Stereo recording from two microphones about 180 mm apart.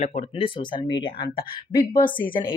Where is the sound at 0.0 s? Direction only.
40° left (ahead or behind).